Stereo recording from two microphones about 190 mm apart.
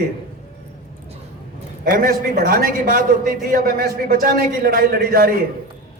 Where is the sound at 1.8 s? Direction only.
50° right (ahead or behind).